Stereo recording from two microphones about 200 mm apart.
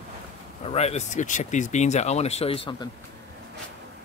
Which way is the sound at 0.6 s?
30° left (ahead or behind).